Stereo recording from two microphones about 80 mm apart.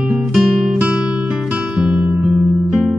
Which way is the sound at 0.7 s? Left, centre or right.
Centre.